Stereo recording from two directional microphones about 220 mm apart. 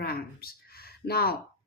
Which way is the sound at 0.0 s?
45° left (ahead or behind).